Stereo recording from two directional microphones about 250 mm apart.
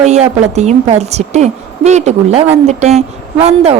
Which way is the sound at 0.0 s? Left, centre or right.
Right.